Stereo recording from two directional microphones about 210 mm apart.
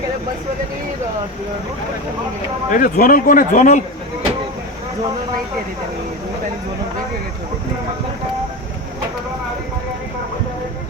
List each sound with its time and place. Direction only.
2.6 s a man's voice: 40° left (ahead or behind)